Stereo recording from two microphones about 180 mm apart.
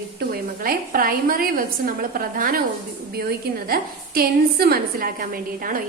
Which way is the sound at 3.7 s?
55° right (ahead or behind).